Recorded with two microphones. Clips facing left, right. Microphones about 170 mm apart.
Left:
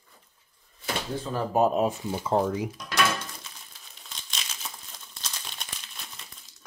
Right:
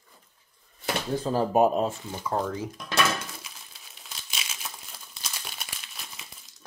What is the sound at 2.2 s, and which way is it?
Speech, 20° left (ahead or behind).